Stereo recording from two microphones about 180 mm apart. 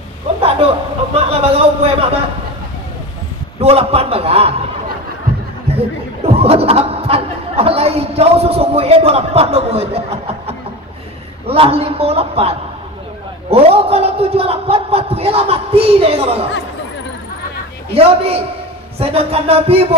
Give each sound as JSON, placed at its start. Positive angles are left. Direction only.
{"t": 0.4, "sound": "a sound", "side_deg": -35}
{"t": 1.1, "sound": "speech", "side_deg": -35}
{"t": 3.6, "sound": "speech", "side_deg": -35}
{"t": 6.2, "sound": "speech", "side_deg": -35}
{"t": 17.9, "sound": "speech", "side_deg": -35}